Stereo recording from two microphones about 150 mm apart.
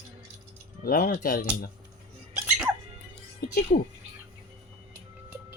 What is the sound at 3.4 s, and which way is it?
Speech, 70° left (ahead or behind).